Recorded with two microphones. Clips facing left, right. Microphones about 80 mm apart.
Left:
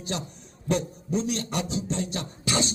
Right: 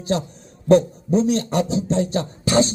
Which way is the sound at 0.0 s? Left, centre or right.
Right.